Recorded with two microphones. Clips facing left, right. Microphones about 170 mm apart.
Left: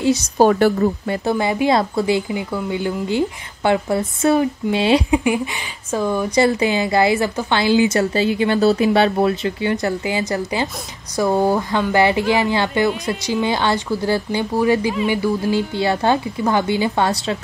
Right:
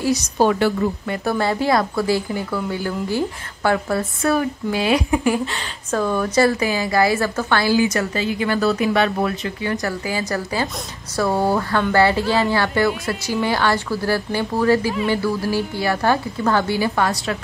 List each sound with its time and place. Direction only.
0.4 s a woman's voice: 45° left (ahead or behind)
1.0 s a woman's voice: 30° left (ahead or behind)
1.4 s a woman's voice: 15° left (ahead or behind)